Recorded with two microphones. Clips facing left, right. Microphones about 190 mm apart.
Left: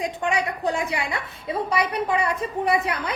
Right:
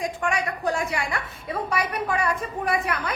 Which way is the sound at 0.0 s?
20° left (ahead or behind).